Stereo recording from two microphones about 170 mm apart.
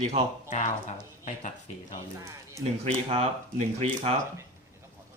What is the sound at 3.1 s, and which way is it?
Speech, 40° right (ahead or behind).